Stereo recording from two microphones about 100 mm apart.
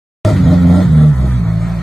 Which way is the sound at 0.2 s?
Centre (ahead or behind).